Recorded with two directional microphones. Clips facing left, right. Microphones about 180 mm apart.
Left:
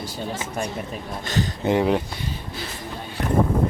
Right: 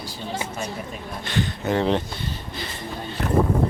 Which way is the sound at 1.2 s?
40° left (ahead or behind).